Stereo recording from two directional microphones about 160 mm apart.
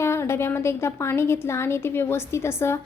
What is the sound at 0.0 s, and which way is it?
A woman's voice, 15° left (ahead or behind).